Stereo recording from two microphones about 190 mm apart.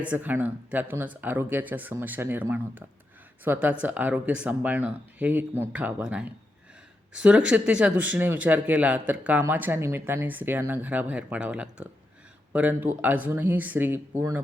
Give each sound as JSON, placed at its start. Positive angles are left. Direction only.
{"t": 0.0, "sound": "speech", "side_deg": -10}